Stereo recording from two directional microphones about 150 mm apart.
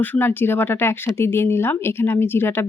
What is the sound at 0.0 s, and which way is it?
Speech, 10° left (ahead or behind).